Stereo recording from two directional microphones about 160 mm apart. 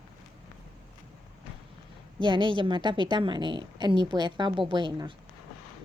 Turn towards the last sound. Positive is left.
turn(degrees=-30)  # may be behind; listen again after turning